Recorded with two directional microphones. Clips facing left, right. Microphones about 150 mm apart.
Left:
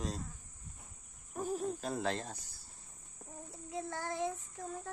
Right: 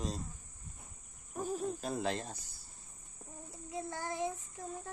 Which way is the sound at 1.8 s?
15° right (ahead or behind).